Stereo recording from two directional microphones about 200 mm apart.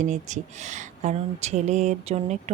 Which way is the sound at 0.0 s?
35° right (ahead or behind).